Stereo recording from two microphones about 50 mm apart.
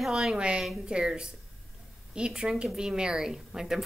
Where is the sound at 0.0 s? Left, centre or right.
Centre.